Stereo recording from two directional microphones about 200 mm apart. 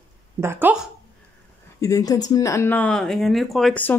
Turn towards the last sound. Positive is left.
turn(degrees=5)  # may be behind; listen again after turning